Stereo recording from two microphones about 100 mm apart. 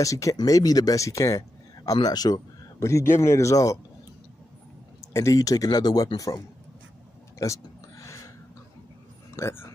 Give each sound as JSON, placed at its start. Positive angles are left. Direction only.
{"t": 0.0, "sound": "speech", "side_deg": 35}
{"t": 5.1, "sound": "speech", "side_deg": 35}
{"t": 7.3, "sound": "a sound", "side_deg": 30}
{"t": 9.4, "sound": "speech", "side_deg": 25}